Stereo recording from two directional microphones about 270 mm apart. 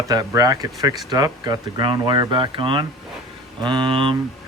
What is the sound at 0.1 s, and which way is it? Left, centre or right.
Speech, centre.